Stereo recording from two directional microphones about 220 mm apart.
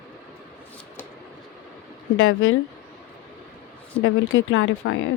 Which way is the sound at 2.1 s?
65° left (ahead or behind).